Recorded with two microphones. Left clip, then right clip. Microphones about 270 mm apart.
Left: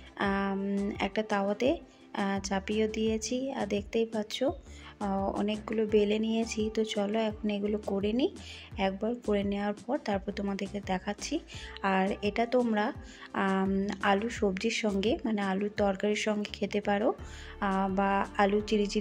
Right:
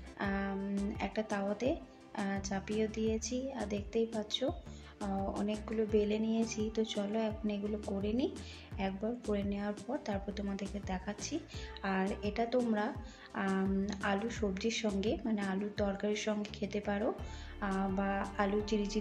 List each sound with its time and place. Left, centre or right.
0.2 s music: left
0.9 s speech: left
5.3 s speech: centre
5.7 s speech: left